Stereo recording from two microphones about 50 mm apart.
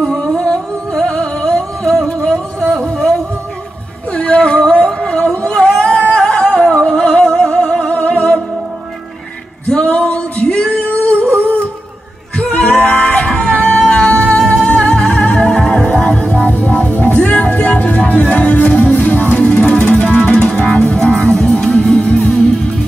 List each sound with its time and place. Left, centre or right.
0.0 s music: centre
4.1 s a sound: left
5.5 s singing: centre
5.9 s music: left
9.7 s female singing: left
12.4 s music: left
13.7 s music: centre
14.1 s music: left
19.0 s music: left; by 22.6 s centre